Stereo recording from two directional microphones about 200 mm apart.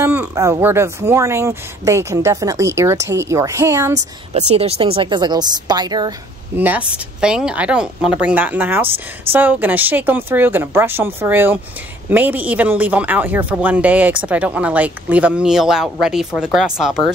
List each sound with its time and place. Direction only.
0.0 s speech: 10° right (ahead or behind)
4.3 s speech: 30° right (ahead or behind)
6.5 s speech: 10° right (ahead or behind)
8.8 s speech: 30° right (ahead or behind)
9.3 s speech: 10° right (ahead or behind)